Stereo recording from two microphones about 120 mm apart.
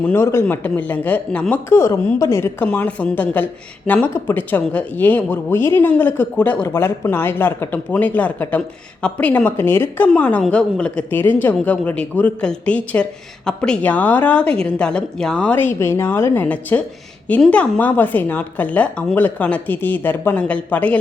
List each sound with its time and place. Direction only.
0.1 s a man's voice: 20° left (ahead or behind)